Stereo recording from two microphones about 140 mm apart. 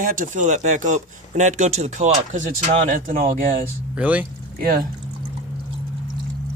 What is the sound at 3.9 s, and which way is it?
Speech, 10° right (ahead or behind).